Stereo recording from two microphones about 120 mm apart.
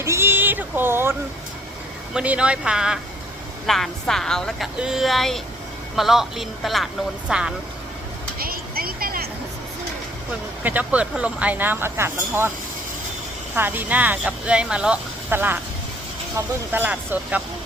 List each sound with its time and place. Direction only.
0.0 s a sound: 20° right (ahead or behind)
2.1 s a woman's voice: 10° right (ahead or behind)
10.6 s speech: 15° right (ahead or behind)
13.6 s speech: 15° right (ahead or behind)
16.7 s speech: 15° right (ahead or behind)